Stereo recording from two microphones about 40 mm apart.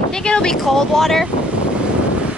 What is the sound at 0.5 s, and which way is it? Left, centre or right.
Speech, centre.